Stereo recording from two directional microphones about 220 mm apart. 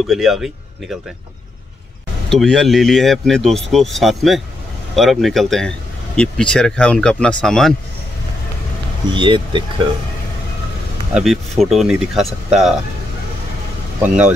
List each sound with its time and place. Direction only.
0.1 s speech: centre (ahead or behind)
2.2 s speech: centre (ahead or behind)
9.1 s speech: 20° right (ahead or behind)
11.1 s speech: centre (ahead or behind)
14.0 s speech: 5° right (ahead or behind)